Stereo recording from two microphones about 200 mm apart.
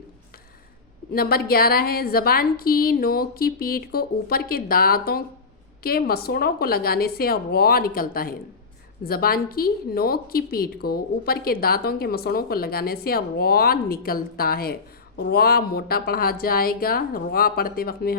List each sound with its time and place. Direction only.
1.1 s a woman's voice: 50° left (ahead or behind)